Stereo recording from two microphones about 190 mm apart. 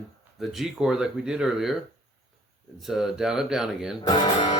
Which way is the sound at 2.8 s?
Centre (ahead or behind).